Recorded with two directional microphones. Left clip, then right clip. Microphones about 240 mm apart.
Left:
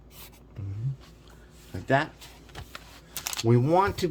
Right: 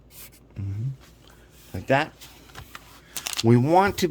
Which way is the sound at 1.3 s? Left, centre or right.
Right.